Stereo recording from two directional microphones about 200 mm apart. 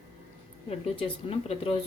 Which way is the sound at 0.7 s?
30° left (ahead or behind).